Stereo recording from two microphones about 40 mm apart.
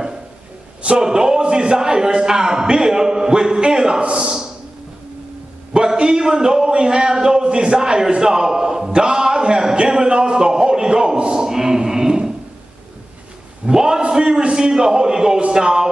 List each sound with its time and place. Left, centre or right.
0.8 s a man's voice: centre
5.7 s a man's voice: centre
13.7 s a man's voice: centre